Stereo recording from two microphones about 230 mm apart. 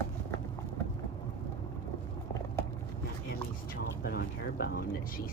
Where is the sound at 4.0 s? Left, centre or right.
Left.